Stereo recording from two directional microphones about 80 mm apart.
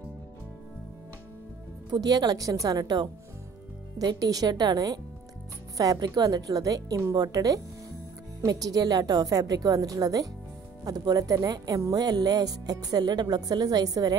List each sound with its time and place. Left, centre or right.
1.9 s a woman's voice: right